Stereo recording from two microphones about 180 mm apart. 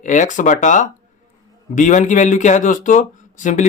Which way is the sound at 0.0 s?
45° left (ahead or behind).